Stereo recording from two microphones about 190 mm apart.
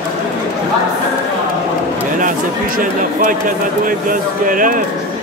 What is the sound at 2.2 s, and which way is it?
Speech, 45° right (ahead or behind).